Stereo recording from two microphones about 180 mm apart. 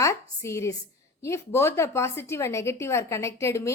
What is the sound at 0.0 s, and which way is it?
A woman's voice, 15° left (ahead or behind).